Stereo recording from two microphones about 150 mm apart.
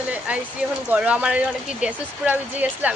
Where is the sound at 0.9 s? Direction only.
10° right (ahead or behind).